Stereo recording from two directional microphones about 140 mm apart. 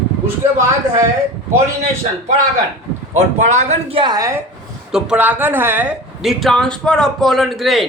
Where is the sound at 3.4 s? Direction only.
55° right (ahead or behind).